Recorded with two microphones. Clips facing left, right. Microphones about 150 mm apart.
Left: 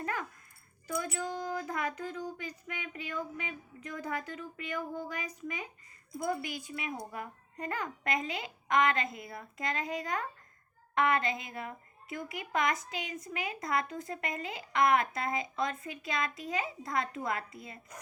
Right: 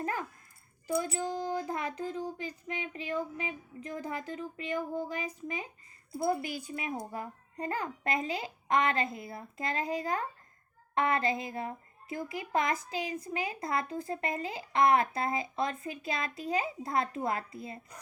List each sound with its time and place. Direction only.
0.0 s dog: 30° right (ahead or behind)
0.9 s speech: 30° right (ahead or behind)